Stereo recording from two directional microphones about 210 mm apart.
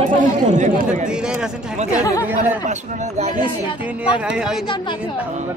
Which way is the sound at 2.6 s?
35° right (ahead or behind).